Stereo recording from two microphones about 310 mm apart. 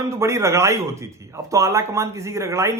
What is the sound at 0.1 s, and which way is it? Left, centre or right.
A man's voice, centre.